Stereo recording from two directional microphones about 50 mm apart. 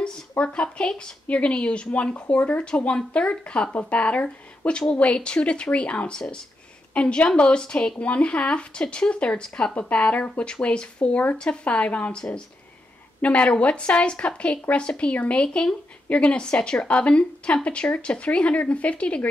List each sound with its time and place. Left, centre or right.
0.4 s speech: left